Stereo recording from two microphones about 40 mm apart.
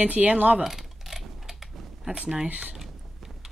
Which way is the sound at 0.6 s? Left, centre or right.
Centre.